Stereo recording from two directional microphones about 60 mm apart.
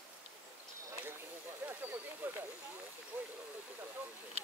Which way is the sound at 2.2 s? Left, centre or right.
Right.